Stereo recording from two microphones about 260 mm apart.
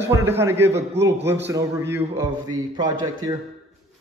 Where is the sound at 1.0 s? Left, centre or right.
Centre.